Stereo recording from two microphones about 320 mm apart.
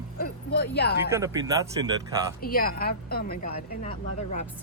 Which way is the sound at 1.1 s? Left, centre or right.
Centre.